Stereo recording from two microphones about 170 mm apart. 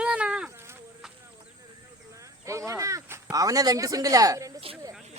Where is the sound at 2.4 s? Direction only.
20° right (ahead or behind).